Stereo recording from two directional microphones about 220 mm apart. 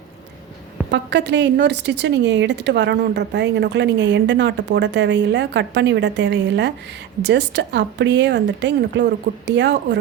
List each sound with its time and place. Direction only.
0.9 s a woman's voice: 50° right (ahead or behind)